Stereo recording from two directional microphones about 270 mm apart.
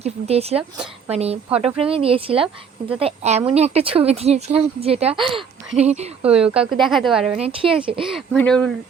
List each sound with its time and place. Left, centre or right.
0.0 s speech: right
1.5 s a woman's voice: centre
1.8 s speech: right
5.0 s a woman's voice: centre
5.9 s speech: right
6.3 s a woman's voice: centre
7.8 s speech: centre
8.0 s a woman's voice: centre